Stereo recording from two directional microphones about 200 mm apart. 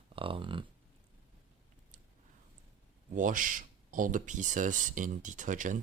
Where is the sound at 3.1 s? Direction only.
40° right (ahead or behind).